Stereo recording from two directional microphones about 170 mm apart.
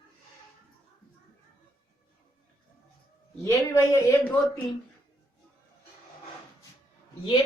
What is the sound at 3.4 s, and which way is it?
Speech, 20° left (ahead or behind).